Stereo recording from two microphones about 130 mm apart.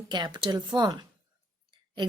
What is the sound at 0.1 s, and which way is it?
Speech, 35° right (ahead or behind).